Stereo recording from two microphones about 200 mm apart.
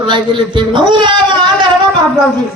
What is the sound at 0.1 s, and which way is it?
Speech, 25° right (ahead or behind).